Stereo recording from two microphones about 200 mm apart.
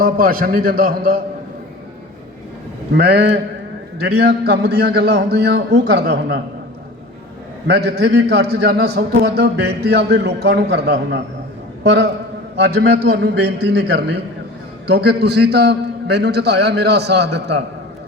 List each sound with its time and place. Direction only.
0.0 s a man's voice: 45° right (ahead or behind)
2.9 s a man's voice: 55° right (ahead or behind)
7.7 s a man's voice: 55° right (ahead or behind)